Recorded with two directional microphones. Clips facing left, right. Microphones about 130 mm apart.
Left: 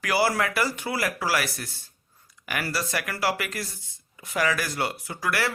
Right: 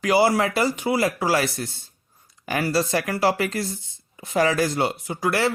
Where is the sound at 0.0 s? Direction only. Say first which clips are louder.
Right 5 dB; 25° right (ahead or behind).